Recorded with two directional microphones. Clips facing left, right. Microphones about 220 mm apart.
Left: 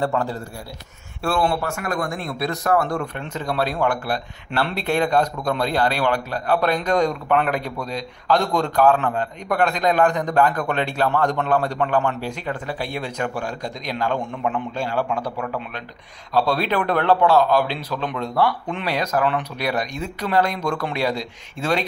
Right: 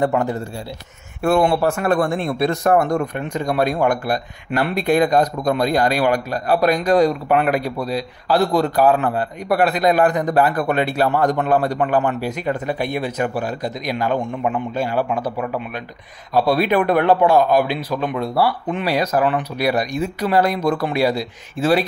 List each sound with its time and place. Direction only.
0.0 s speech: 20° right (ahead or behind)
1.6 s a man's voice: 35° right (ahead or behind); by 3.4 s 20° right (ahead or behind)
4.5 s a man's voice: 15° right (ahead or behind)
5.0 s a man's voice: 40° right (ahead or behind)
5.5 s a man's voice: 10° right (ahead or behind)
13.0 s a man's voice: 5° right (ahead or behind)